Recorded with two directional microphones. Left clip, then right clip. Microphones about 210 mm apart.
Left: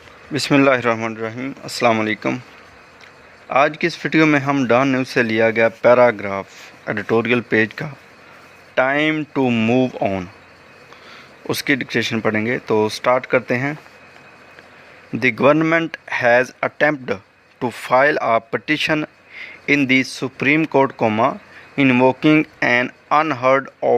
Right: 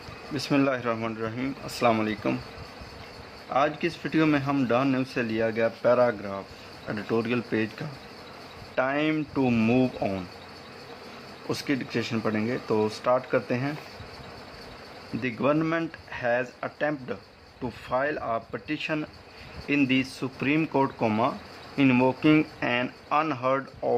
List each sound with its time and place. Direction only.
0.3 s speech: 40° left (ahead or behind)
3.5 s speech: 45° left (ahead or behind)
11.4 s speech: 30° left (ahead or behind)
15.2 s speech: 40° left (ahead or behind)